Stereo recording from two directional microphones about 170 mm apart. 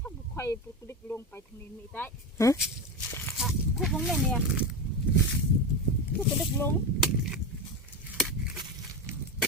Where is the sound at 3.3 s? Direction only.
Centre (ahead or behind).